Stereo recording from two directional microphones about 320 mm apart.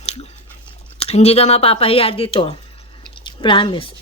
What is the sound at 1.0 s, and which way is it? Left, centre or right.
Speech, centre.